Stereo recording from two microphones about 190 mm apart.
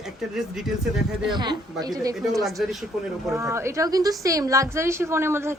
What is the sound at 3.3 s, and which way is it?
A woman's voice, 15° right (ahead or behind).